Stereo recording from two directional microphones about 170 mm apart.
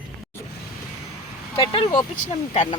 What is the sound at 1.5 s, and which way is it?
Speech, 30° left (ahead or behind).